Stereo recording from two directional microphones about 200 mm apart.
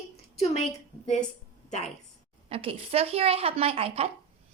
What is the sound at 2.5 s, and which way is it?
A woman's voice, 30° right (ahead or behind).